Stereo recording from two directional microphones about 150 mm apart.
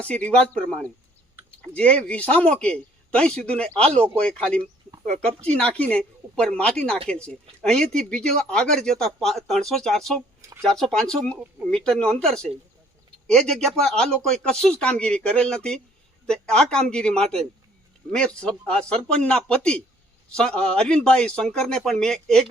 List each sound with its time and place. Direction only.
0.0 s speech: 10° left (ahead or behind)